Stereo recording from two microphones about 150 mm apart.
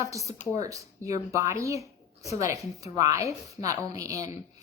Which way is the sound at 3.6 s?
20° right (ahead or behind).